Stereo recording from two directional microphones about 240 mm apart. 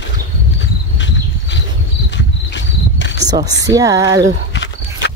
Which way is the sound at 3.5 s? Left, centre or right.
Centre.